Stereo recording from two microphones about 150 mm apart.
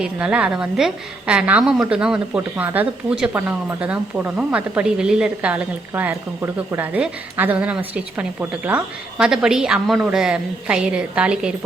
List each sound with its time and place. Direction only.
0.0 s a woman's voice: 10° right (ahead or behind)